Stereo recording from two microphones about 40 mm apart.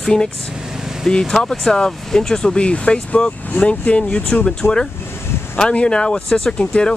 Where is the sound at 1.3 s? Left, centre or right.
Centre; by 4.5 s left.